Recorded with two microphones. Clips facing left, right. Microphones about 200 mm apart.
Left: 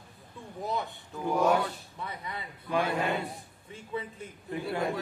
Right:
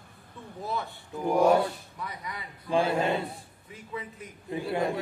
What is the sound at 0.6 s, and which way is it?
Speech, 15° left (ahead or behind).